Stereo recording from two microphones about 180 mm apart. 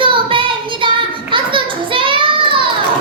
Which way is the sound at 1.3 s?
30° right (ahead or behind).